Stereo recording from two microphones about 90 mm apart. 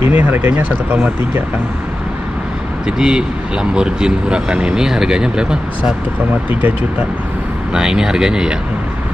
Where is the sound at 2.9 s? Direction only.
10° right (ahead or behind).